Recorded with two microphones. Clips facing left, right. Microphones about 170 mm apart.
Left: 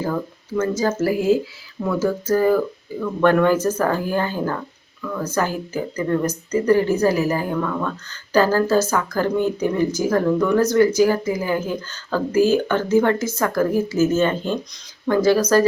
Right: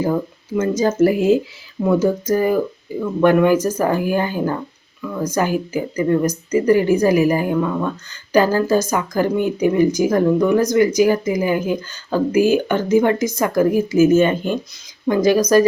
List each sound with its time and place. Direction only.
0.0 s a woman's voice: 15° right (ahead or behind)